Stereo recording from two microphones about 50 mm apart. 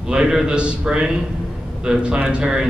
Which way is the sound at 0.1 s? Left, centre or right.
Centre.